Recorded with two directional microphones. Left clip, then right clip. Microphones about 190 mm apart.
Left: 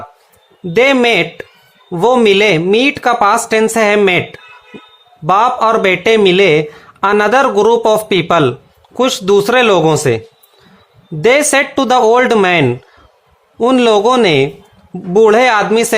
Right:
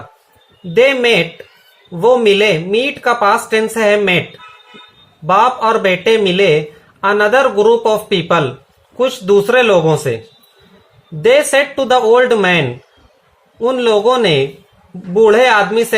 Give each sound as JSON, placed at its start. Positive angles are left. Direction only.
{"t": 0.7, "sound": "speech", "side_deg": 50}
{"t": 5.2, "sound": "speech", "side_deg": 50}
{"t": 11.2, "sound": "speech", "side_deg": 50}